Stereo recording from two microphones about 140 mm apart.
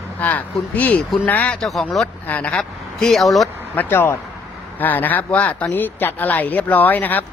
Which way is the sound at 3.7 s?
15° left (ahead or behind).